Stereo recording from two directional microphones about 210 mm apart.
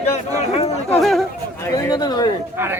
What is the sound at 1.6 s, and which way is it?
Speech, 15° left (ahead or behind).